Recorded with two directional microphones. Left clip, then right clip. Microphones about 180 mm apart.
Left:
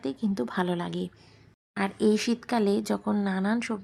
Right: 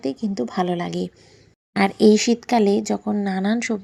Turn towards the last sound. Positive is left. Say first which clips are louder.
# right 6 dB
turn(degrees=-15)  # may be behind; listen again after turning